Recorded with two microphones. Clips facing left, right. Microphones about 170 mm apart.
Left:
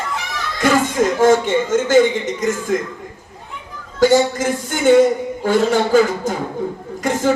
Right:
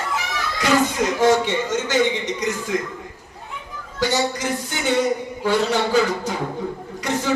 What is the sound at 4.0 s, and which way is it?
A man's voice, 50° left (ahead or behind).